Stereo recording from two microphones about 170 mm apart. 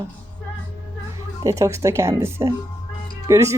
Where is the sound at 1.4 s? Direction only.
20° right (ahead or behind).